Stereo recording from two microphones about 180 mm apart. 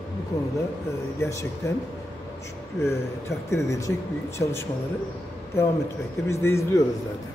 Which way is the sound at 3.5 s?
15° left (ahead or behind).